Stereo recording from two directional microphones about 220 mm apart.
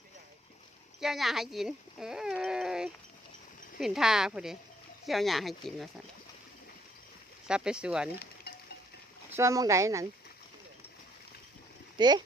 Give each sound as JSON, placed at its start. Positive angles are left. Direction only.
{"t": 1.0, "sound": "speech", "side_deg": 0}
{"t": 7.4, "sound": "speech", "side_deg": -5}
{"t": 8.5, "sound": "a sound", "side_deg": 45}
{"t": 9.3, "sound": "speech", "side_deg": -15}
{"t": 11.9, "sound": "speech", "side_deg": -20}